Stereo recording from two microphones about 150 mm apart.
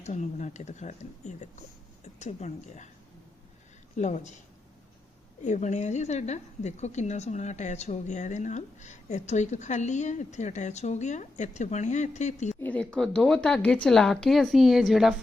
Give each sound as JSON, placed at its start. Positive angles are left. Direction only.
{"t": 0.0, "sound": "a woman's voice", "side_deg": 50}
{"t": 3.9, "sound": "a woman's voice", "side_deg": 55}
{"t": 5.4, "sound": "a woman's voice", "side_deg": 55}
{"t": 12.5, "sound": "a woman's voice", "side_deg": 10}